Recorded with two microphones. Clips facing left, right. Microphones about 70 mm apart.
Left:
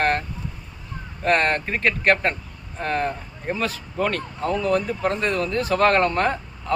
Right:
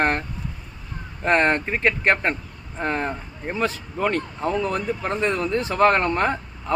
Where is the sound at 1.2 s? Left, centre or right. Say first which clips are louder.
Right 1 dB; centre.